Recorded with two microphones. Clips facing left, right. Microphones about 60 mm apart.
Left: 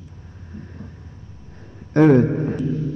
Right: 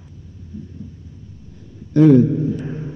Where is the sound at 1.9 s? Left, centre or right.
Left.